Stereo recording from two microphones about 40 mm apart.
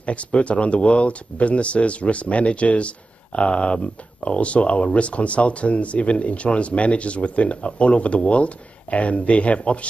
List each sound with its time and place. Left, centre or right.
0.0 s speech: left